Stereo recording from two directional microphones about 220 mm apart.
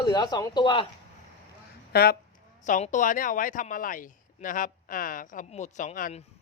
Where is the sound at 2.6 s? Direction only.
35° left (ahead or behind).